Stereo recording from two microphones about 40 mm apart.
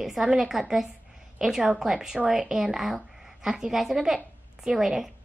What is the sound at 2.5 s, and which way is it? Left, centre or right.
A woman's voice, centre.